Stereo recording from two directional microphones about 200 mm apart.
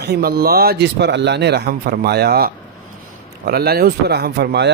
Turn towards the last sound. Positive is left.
turn(degrees=-55)  # may be behind; listen again after turning